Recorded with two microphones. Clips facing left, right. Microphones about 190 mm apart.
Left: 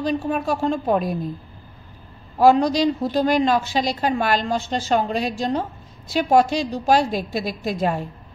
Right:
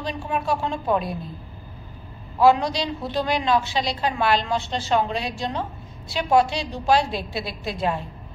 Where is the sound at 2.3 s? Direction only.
45° left (ahead or behind).